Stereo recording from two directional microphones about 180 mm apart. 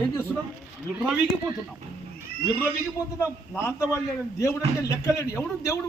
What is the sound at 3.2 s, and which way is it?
A man's voice, 15° left (ahead or behind).